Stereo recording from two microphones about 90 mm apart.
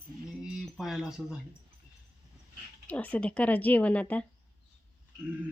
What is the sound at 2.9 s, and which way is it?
Speech, 15° left (ahead or behind).